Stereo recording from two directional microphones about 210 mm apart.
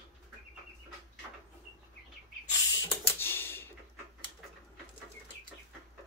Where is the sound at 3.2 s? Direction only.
10° left (ahead or behind).